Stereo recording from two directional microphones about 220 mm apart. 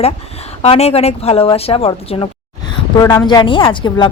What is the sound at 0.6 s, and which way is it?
A woman's voice, 30° left (ahead or behind).